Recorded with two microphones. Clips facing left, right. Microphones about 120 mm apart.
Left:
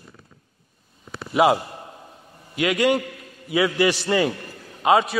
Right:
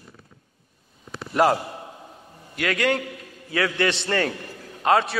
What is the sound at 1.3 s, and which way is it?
A man's voice, 5° left (ahead or behind).